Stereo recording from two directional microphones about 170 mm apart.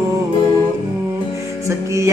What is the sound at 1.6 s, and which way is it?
Music, 15° right (ahead or behind).